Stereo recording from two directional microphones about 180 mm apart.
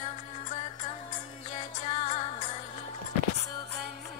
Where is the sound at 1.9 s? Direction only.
35° left (ahead or behind).